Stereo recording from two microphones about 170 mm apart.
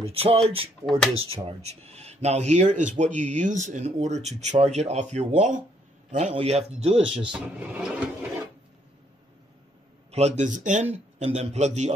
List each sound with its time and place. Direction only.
0.0 s a man's voice: 35° right (ahead or behind)
0.8 s speech: 5° left (ahead or behind)
1.1 s a man's voice: 35° right (ahead or behind)
7.3 s speech: 5° right (ahead or behind)
10.1 s a man's voice: 40° right (ahead or behind)